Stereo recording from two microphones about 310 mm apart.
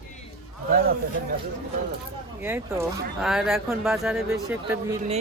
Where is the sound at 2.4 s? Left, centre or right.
Centre.